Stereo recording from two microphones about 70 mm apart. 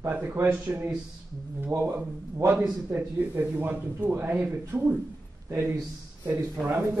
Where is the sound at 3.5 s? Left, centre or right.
Right.